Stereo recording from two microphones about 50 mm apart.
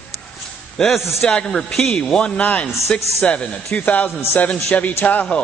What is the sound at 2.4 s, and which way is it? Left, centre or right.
A man's voice, left.